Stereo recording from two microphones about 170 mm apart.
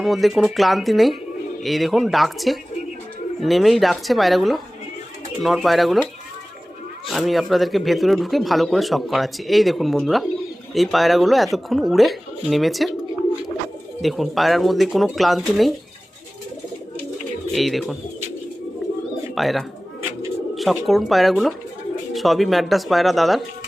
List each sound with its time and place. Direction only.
0.0 s speech: centre (ahead or behind)
7.1 s speech: centre (ahead or behind)
14.0 s speech: centre (ahead or behind)
17.5 s speech: centre (ahead or behind)
19.4 s speech: centre (ahead or behind)